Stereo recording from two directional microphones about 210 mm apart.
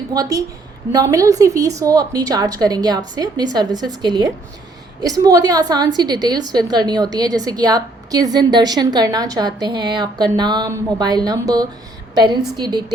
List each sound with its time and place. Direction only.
0.1 s a woman's voice: 15° right (ahead or behind)